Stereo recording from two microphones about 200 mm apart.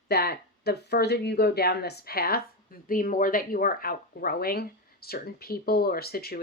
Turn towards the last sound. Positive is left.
turn(degrees=50)  # may be behind; listen again after turning